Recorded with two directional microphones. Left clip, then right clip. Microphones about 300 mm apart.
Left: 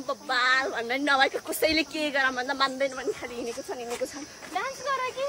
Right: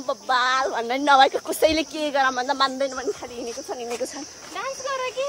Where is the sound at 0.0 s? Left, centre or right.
Centre.